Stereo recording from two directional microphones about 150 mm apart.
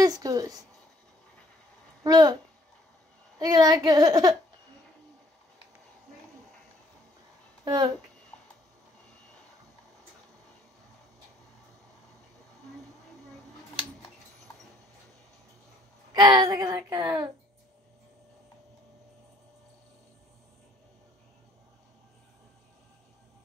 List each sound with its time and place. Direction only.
0.0 s a sound: 25° right (ahead or behind)
2.0 s speech: 25° right (ahead or behind)
3.3 s speech: 25° right (ahead or behind)
7.6 s speech: 25° right (ahead or behind)
16.1 s speech: 30° right (ahead or behind)